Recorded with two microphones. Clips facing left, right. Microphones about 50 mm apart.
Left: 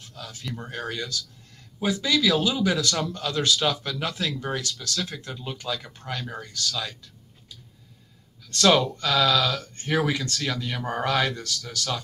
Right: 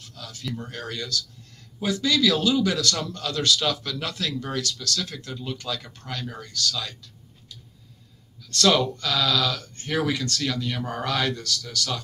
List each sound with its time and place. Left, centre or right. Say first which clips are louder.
0.0 s a man's voice: right 1 dB; left
8.5 s a man's voice: left 1 dB; centre